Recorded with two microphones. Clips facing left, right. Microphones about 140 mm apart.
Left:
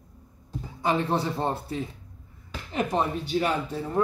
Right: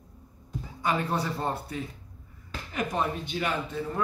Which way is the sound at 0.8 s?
25° left (ahead or behind).